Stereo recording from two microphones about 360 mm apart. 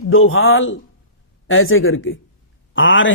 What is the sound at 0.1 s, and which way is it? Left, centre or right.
Speech, left.